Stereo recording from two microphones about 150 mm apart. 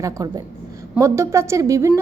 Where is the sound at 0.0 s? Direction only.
25° right (ahead or behind).